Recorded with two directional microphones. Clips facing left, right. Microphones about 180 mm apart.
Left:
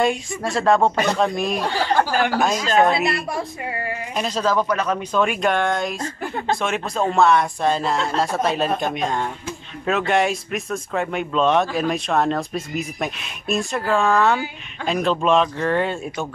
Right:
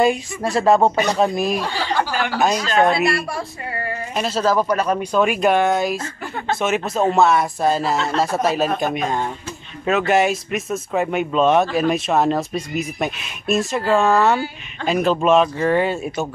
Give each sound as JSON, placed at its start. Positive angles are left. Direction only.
{"t": 0.0, "sound": "speech", "side_deg": 0}
{"t": 1.8, "sound": "speech", "side_deg": 45}
{"t": 2.4, "sound": "speech", "side_deg": 0}
{"t": 3.3, "sound": "music", "side_deg": 15}
{"t": 4.1, "sound": "speech", "side_deg": -5}